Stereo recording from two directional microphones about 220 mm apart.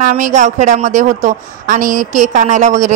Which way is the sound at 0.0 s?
35° right (ahead or behind).